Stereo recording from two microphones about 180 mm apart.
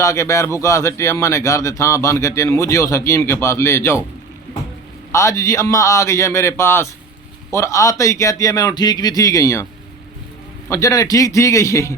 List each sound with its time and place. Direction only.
0.0 s speech: 15° left (ahead or behind)
5.1 s a man's voice: 15° left (ahead or behind)
10.7 s speech: 20° left (ahead or behind)